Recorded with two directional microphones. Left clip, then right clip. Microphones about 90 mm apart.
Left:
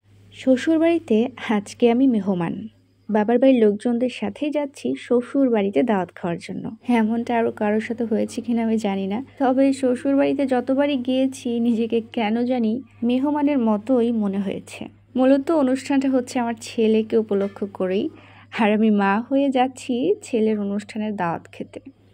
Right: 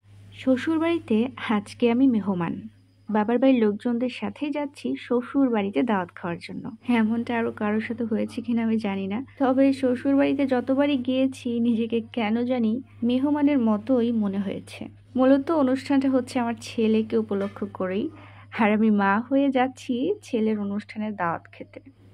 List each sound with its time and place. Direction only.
0.4 s speech: 25° left (ahead or behind)